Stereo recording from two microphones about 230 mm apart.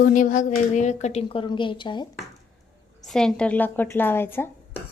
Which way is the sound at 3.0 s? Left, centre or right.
Centre.